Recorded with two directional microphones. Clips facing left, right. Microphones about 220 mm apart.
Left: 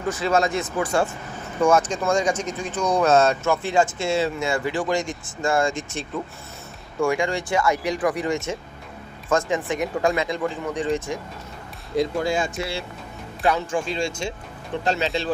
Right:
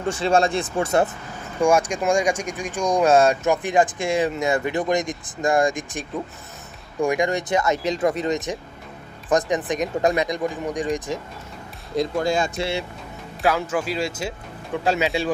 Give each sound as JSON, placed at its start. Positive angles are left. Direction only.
{"t": 0.1, "sound": "speech", "side_deg": -30}
{"t": 1.6, "sound": "speech", "side_deg": -10}
{"t": 12.2, "sound": "speech", "side_deg": -40}
{"t": 13.4, "sound": "speech", "side_deg": -5}